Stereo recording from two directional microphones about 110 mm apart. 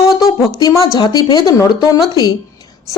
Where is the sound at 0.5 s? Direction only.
35° left (ahead or behind).